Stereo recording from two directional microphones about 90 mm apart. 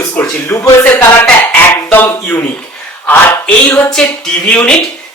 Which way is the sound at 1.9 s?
20° left (ahead or behind).